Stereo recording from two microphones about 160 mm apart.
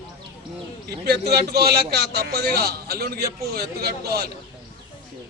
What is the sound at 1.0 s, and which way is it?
A man's voice, 80° right.